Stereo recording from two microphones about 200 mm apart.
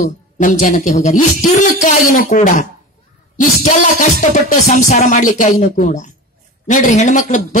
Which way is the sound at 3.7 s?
40° left (ahead or behind).